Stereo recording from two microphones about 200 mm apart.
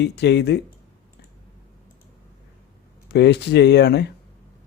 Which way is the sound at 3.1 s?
60° left (ahead or behind).